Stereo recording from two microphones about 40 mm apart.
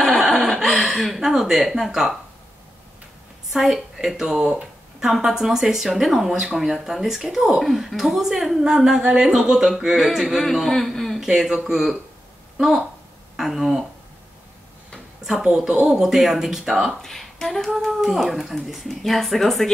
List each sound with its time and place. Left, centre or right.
0.0 s a sound: centre
1.3 s speech: centre
3.5 s speech: centre
10.5 s a man's voice: centre
11.2 s speech: centre
13.4 s speech: centre
15.2 s speech: centre
17.0 s speech: centre